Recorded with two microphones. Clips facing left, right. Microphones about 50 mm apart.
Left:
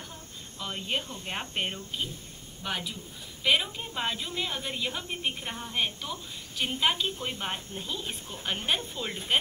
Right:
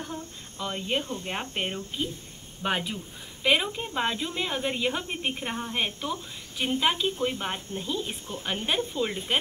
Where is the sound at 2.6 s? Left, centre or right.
Right.